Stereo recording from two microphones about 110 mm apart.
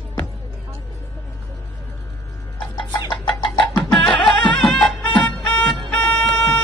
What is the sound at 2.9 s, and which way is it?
Chicken, 40° left (ahead or behind).